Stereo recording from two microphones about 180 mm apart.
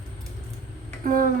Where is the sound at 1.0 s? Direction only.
50° right (ahead or behind).